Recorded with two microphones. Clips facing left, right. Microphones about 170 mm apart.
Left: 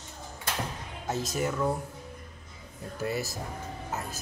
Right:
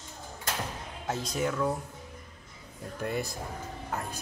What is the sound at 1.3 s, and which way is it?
Speech, 5° left (ahead or behind).